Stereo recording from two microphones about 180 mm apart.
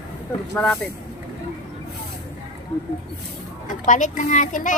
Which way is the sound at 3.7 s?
45° left (ahead or behind).